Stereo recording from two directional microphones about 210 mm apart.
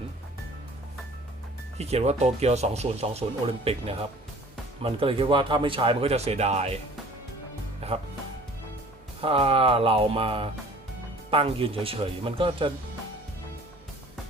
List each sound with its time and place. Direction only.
1.8 s speech: 30° right (ahead or behind)
7.8 s speech: 30° right (ahead or behind)
9.2 s speech: 25° right (ahead or behind)